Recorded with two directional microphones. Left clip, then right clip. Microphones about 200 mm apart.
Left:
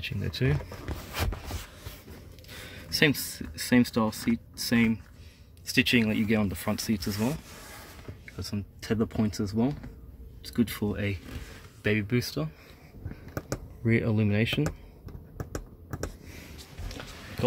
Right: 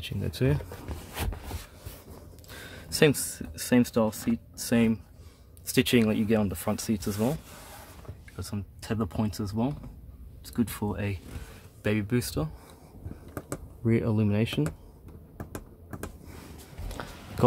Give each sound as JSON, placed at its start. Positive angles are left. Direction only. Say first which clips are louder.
{"t": 0.2, "sound": "speech", "louder": "right 3 dB", "side_deg": -15}
{"t": 2.7, "sound": "speech", "louder": "right 1 dB", "side_deg": -20}
{"t": 5.7, "sound": "speech", "louder": "even", "side_deg": -25}
{"t": 6.0, "sound": "speech", "louder": "right 2 dB", "side_deg": -10}
{"t": 8.4, "sound": "speech", "louder": "left 2 dB", "side_deg": -5}
{"t": 13.3, "sound": "a sound", "louder": "left 2 dB", "side_deg": -5}
{"t": 17.0, "sound": "a sound", "louder": "right 4 dB", "side_deg": -30}